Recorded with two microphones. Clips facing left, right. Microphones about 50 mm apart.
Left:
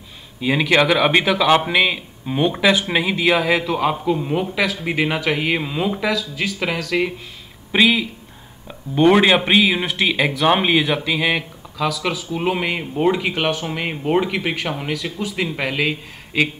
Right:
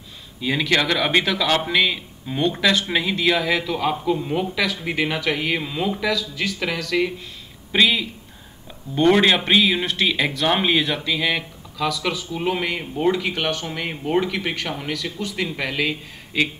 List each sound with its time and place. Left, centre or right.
0.4 s a man's voice: centre
6.9 s a man's voice: centre
12.4 s a man's voice: centre